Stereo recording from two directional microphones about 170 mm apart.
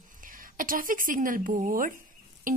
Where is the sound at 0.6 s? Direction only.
55° right (ahead or behind).